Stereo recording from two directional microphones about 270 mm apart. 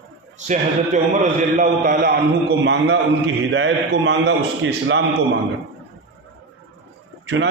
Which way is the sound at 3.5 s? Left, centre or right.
Right.